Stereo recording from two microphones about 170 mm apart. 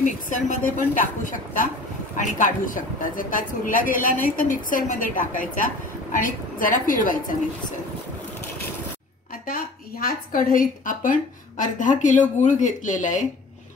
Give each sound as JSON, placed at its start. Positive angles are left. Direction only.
{"t": 0.0, "sound": "speech", "side_deg": 50}
{"t": 9.5, "sound": "speech", "side_deg": 55}